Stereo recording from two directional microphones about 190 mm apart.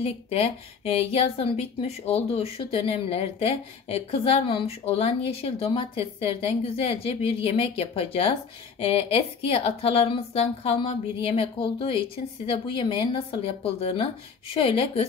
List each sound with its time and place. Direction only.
0.0 s a woman's voice: 30° left (ahead or behind)